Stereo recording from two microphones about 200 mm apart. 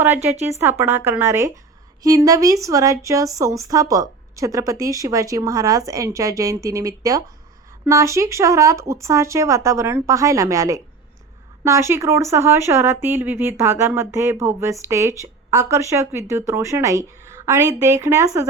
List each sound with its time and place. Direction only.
0.0 s speech: 10° right (ahead or behind)